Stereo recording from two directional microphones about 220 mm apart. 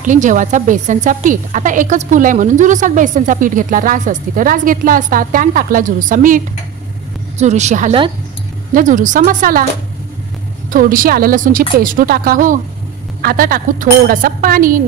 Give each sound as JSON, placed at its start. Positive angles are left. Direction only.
{"t": 0.0, "sound": "a woman's voice", "side_deg": -35}
{"t": 10.7, "sound": "a woman's voice", "side_deg": -40}